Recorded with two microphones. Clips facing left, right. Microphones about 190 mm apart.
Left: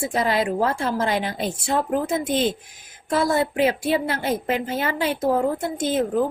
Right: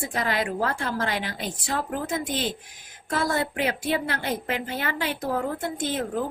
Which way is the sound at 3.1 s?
20° left (ahead or behind).